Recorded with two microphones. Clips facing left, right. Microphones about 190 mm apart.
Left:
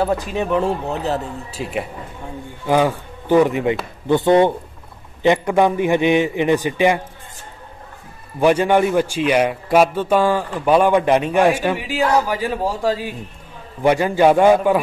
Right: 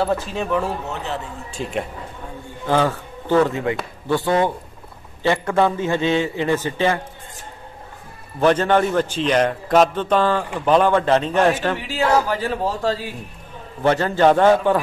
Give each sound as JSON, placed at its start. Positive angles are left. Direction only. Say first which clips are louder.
{"t": 0.0, "sound": "speech", "louder": "left 2 dB", "side_deg": 15}
{"t": 1.5, "sound": "a man's voice", "louder": "right 1 dB", "side_deg": 5}
{"t": 8.4, "sound": "a man's voice", "louder": "left 2 dB", "side_deg": 10}